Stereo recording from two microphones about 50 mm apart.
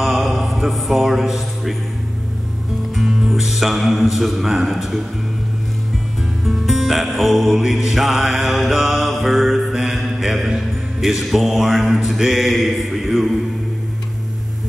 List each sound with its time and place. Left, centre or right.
0.0 s a sound: centre
3.0 s music: centre
6.4 s music: centre
9.7 s mantra: centre